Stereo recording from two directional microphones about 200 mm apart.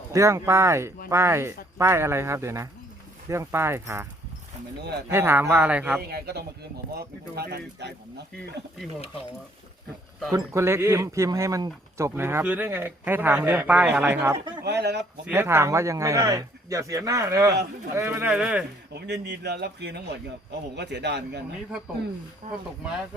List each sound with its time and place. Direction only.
0.1 s speech: 15° right (ahead or behind)
5.1 s speech: 10° right (ahead or behind)
6.0 s speech: 55° right (ahead or behind)
10.3 s speech: 15° right (ahead or behind)
14.6 s speech: 55° right (ahead or behind)
15.3 s speech: 10° right (ahead or behind)
18.9 s speech: 60° right (ahead or behind)
22.4 s speech: 35° right (ahead or behind)